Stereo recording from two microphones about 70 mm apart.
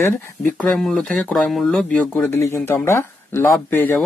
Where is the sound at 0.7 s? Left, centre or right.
Centre.